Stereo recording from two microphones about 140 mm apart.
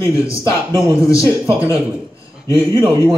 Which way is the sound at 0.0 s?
25° left (ahead or behind).